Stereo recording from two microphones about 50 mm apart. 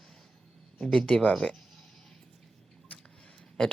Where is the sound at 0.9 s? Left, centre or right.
Centre.